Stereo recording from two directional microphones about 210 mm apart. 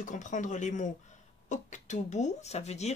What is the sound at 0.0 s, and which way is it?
Speech, 35° left (ahead or behind).